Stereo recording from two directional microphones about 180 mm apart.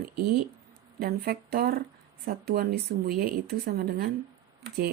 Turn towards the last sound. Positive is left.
turn(degrees=-65)  # may be behind; listen again after turning